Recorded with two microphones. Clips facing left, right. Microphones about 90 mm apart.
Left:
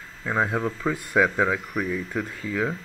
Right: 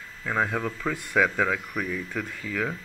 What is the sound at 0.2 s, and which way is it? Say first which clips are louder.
Speech: left 2 dB; 15° left (ahead or behind).